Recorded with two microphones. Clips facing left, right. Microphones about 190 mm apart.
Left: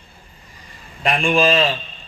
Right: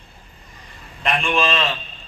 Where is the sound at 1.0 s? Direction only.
30° left (ahead or behind).